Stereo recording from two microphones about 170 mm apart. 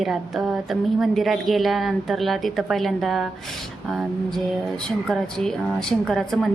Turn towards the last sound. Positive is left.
turn(degrees=0)  # may be behind; listen again after turning